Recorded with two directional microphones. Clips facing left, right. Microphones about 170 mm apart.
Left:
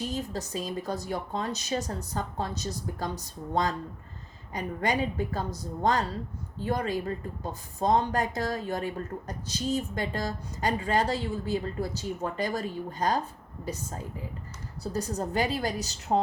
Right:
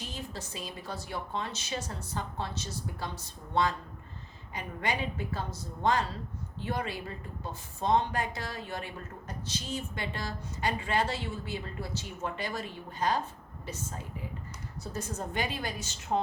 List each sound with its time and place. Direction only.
0.1 s a woman's voice: 40° left (ahead or behind)